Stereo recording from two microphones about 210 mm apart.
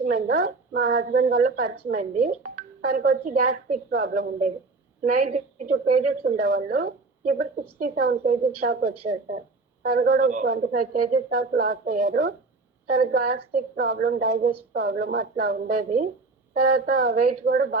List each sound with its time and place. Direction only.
0.0 s a woman's voice: 40° right (ahead or behind)
8.6 s a woman's voice: 50° right (ahead or behind)
9.9 s a woman's voice: 45° right (ahead or behind)
17.4 s a woman's voice: 65° right (ahead or behind)